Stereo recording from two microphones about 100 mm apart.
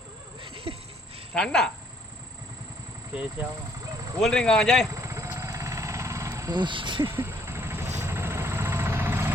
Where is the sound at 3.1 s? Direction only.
15° right (ahead or behind).